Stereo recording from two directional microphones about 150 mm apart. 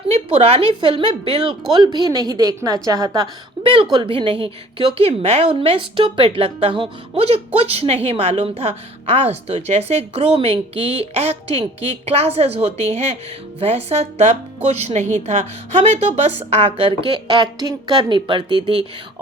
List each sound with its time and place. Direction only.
0.3 s a woman's voice: 40° right (ahead or behind)